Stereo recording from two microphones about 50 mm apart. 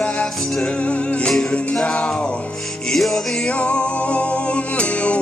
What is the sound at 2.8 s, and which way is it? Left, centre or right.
Music, centre.